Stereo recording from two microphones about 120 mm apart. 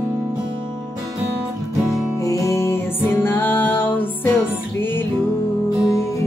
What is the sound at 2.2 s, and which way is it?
Music, 25° left (ahead or behind).